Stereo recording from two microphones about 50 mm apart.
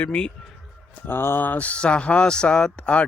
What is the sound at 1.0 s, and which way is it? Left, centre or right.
Speech, left.